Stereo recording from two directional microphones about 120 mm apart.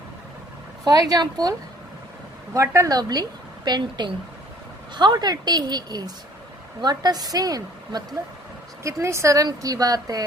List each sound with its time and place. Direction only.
0.9 s a woman's voice: 30° right (ahead or behind)